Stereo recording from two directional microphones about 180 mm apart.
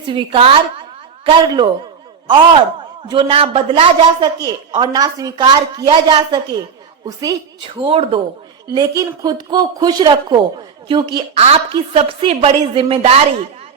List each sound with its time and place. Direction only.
0.1 s a woman's voice: 30° right (ahead or behind)
3.1 s a woman's voice: 30° right (ahead or behind)
4.4 s a woman's voice: 20° right (ahead or behind)
7.8 s a woman's voice: 30° right (ahead or behind)